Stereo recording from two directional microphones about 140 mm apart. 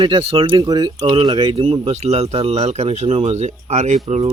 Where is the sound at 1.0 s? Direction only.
40° right (ahead or behind).